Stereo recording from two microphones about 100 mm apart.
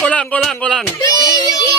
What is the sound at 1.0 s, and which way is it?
Child singing, 40° left (ahead or behind).